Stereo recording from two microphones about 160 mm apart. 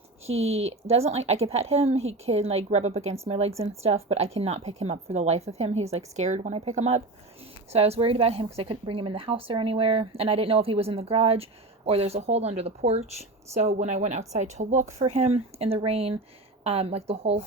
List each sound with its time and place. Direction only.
0.3 s speech: 40° right (ahead or behind)